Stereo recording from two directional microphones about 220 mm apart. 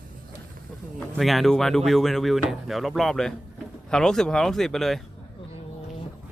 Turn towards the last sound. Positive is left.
turn(degrees=0)  # may be behind; listen again after turning